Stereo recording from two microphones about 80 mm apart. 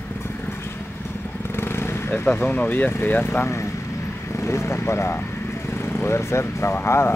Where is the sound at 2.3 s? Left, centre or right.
Left.